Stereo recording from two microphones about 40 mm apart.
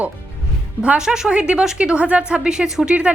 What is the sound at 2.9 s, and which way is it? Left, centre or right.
Speech, right.